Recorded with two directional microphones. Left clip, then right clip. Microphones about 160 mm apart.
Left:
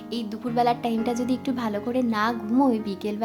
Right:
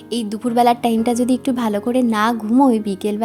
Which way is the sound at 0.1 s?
40° right (ahead or behind).